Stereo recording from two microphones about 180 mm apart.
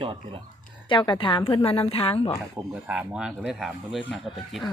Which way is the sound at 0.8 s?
25° left (ahead or behind).